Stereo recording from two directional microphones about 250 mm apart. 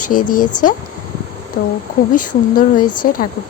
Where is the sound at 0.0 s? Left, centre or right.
Left.